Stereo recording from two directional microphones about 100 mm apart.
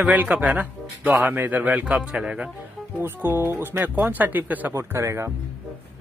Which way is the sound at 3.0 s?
20° right (ahead or behind).